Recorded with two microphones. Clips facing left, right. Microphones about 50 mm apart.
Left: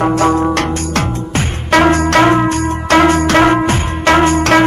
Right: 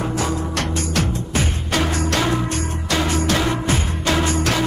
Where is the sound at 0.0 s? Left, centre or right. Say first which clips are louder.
Left 11 dB; left.